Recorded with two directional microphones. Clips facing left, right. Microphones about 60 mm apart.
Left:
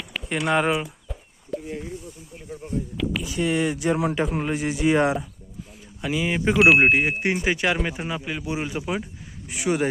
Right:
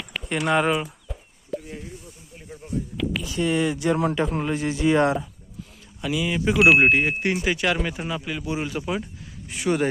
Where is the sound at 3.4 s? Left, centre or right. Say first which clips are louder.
Right 1 dB; centre.